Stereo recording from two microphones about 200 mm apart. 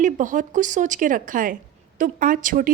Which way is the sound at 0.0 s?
40° right (ahead or behind).